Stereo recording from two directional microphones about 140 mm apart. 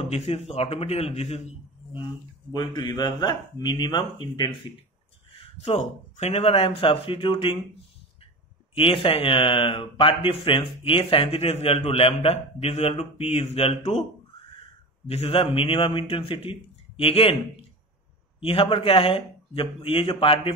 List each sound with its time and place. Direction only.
0.0 s speech: 45° left (ahead or behind)
2.5 s speech: 30° left (ahead or behind)
5.6 s speech: 50° left (ahead or behind)
8.7 s speech: 40° left (ahead or behind)
15.0 s speech: 45° left (ahead or behind)
18.4 s speech: 40° left (ahead or behind)